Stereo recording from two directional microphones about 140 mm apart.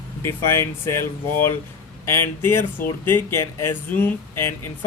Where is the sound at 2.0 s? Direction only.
20° left (ahead or behind).